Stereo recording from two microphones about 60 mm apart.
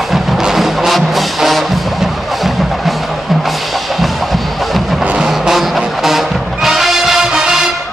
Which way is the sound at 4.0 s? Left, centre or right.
Centre.